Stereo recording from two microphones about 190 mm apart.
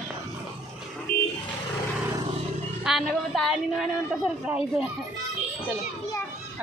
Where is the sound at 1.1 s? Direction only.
50° left (ahead or behind).